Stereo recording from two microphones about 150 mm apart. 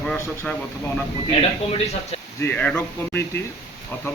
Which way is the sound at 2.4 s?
10° left (ahead or behind).